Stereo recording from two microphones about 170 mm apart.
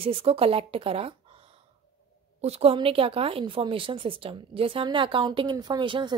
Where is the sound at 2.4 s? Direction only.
35° right (ahead or behind).